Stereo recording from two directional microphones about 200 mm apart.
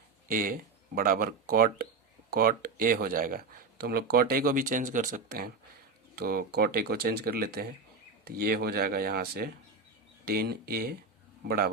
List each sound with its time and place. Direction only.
0.3 s speech: 45° right (ahead or behind)